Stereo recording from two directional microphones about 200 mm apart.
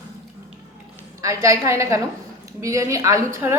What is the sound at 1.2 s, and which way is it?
A woman's voice, 15° right (ahead or behind).